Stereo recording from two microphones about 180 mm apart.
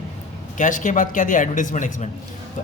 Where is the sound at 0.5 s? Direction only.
45° left (ahead or behind).